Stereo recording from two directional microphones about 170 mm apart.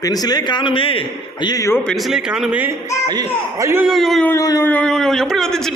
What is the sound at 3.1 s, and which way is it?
Speech, 20° right (ahead or behind).